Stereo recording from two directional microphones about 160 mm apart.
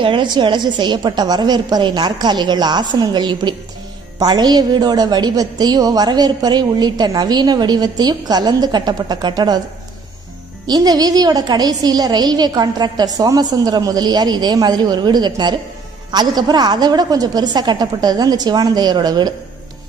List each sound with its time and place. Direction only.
0.0 s a woman's voice: 30° right (ahead or behind)
10.7 s a woman's voice: 25° right (ahead or behind)